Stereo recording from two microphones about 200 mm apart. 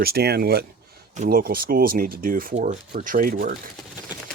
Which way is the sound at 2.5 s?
35° right (ahead or behind).